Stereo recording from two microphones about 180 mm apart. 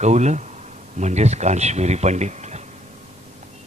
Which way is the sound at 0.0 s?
40° right (ahead or behind).